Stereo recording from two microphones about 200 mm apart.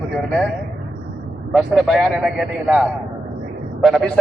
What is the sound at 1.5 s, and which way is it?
A man's voice, centre (ahead or behind).